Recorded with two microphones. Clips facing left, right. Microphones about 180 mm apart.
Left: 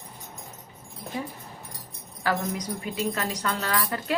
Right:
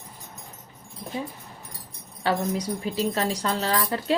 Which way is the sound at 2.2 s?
30° right (ahead or behind).